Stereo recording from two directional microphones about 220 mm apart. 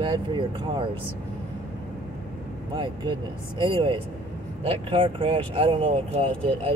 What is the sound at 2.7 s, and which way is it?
Speech, 20° right (ahead or behind).